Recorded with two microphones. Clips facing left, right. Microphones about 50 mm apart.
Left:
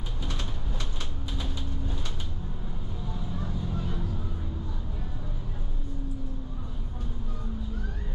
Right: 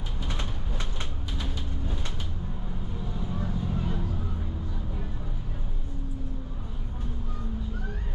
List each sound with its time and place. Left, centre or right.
3.2 s vehicle: centre